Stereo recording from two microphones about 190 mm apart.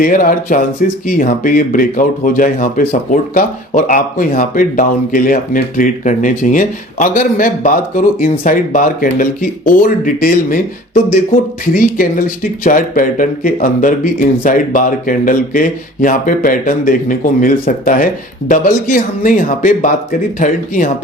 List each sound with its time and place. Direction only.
0.0 s speech: 45° left (ahead or behind)